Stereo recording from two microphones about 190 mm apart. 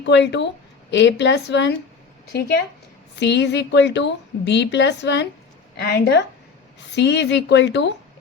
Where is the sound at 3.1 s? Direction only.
65° left (ahead or behind).